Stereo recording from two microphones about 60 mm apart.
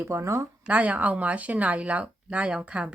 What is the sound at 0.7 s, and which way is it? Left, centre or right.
Speech, right.